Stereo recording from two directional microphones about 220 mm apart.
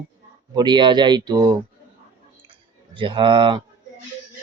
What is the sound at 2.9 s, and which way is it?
Speech, 20° right (ahead or behind).